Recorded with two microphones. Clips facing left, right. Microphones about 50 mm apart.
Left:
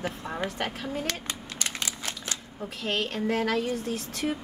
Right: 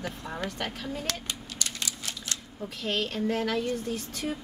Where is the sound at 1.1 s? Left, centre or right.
Left.